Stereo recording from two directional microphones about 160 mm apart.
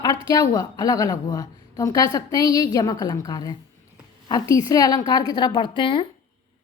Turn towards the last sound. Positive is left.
turn(degrees=30)  # may be behind; listen again after turning